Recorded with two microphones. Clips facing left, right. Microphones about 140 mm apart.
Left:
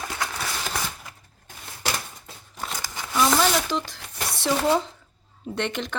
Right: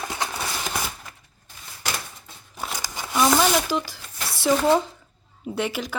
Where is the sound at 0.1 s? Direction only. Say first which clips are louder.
Right 1 dB; 20° right (ahead or behind).